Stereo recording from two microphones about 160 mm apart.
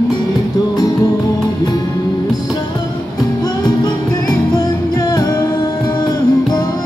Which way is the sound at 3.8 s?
25° left (ahead or behind).